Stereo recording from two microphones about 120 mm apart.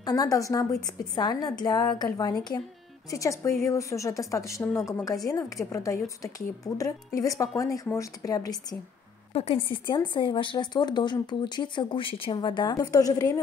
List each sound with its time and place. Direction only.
0.0 s a woman's voice: 30° left (ahead or behind)
9.3 s a woman's voice: 55° left (ahead or behind); by 13.3 s 30° left (ahead or behind)